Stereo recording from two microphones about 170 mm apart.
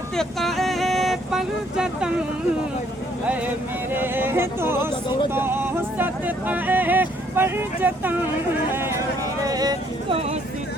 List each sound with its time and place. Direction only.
0.2 s speech: centre (ahead or behind)
3.9 s speech: 10° right (ahead or behind)
9.4 s vehicle: 20° right (ahead or behind)